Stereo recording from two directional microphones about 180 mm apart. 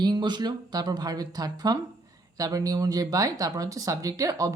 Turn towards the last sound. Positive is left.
turn(degrees=-20)  # may be behind; listen again after turning